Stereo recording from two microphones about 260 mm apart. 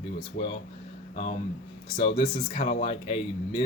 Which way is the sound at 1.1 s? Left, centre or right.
Left.